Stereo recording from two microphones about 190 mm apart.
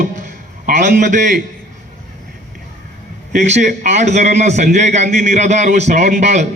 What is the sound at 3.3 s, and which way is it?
A man's voice, 40° right (ahead or behind).